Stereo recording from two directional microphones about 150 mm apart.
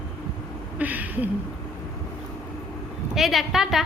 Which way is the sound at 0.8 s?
10° right (ahead or behind).